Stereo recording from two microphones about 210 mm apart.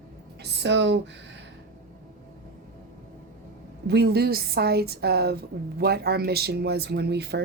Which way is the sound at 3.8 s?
50° right (ahead or behind).